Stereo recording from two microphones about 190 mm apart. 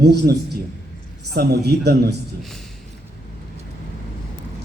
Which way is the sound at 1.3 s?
55° right (ahead or behind).